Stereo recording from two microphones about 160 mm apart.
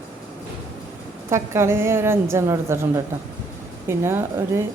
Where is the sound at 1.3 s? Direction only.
15° right (ahead or behind).